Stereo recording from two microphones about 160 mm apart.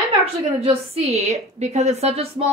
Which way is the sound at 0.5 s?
40° right (ahead or behind).